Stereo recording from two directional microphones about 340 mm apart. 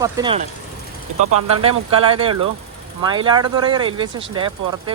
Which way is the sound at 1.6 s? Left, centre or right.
Centre.